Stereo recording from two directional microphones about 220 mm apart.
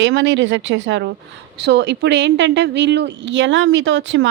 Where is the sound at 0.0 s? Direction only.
55° right (ahead or behind).